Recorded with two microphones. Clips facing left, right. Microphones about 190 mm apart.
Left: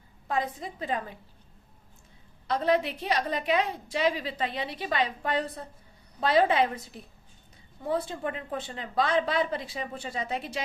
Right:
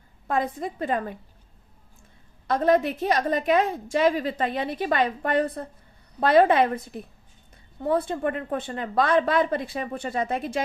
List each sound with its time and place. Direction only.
0.3 s a woman's voice: 50° right (ahead or behind)
2.5 s a woman's voice: 45° right (ahead or behind)